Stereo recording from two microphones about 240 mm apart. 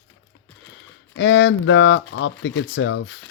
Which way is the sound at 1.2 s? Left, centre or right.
Left.